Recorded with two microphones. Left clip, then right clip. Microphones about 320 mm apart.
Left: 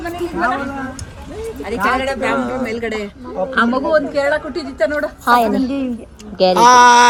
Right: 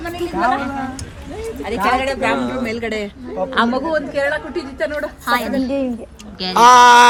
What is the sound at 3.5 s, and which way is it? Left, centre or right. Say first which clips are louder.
Speech: left 3 dB; right.